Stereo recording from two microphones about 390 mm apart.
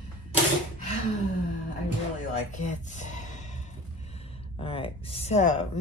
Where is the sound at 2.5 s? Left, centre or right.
Centre.